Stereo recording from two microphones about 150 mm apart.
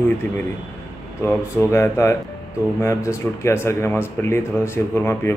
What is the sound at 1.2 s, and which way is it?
Speech, 20° left (ahead or behind).